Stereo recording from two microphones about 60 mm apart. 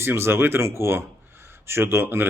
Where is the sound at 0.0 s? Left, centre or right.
Right.